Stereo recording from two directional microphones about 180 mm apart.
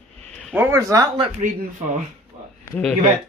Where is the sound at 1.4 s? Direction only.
45° right (ahead or behind).